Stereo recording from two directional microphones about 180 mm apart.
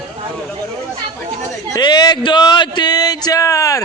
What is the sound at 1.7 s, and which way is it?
Speech, 25° left (ahead or behind).